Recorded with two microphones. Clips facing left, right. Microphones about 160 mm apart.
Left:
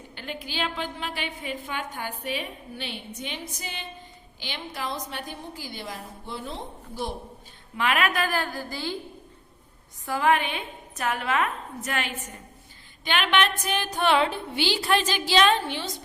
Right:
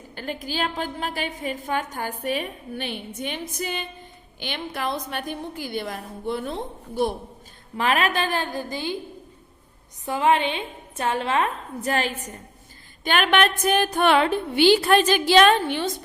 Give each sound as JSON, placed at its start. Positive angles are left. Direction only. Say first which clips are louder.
{"t": 0.2, "sound": "a woman's voice", "louder": "right 4 dB", "side_deg": -45}
{"t": 7.8, "sound": "a woman's voice", "louder": "right 2 dB", "side_deg": -35}
{"t": 10.1, "sound": "a woman's voice", "louder": "right 3 dB", "side_deg": -20}
{"t": 13.1, "sound": "a woman's voice", "louder": "right 4 dB", "side_deg": -45}